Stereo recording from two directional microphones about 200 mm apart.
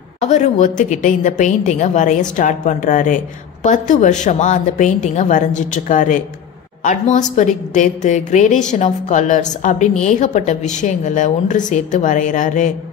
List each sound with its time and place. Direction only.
0.2 s a woman's voice: 35° left (ahead or behind)